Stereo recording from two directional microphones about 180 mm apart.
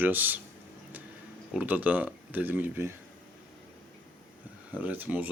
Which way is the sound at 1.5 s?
10° right (ahead or behind).